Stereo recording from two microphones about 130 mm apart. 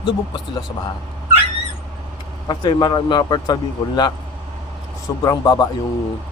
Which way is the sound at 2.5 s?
35° left (ahead or behind).